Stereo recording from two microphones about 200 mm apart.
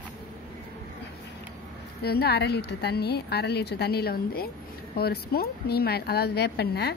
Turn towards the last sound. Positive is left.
turn(degrees=55)  # may be behind; listen again after turning